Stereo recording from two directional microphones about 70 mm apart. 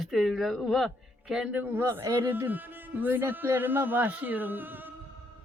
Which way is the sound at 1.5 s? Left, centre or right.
Right.